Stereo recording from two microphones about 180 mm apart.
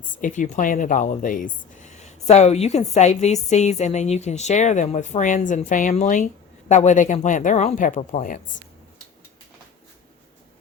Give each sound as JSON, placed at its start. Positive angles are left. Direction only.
{"t": 0.0, "sound": "speech", "side_deg": 45}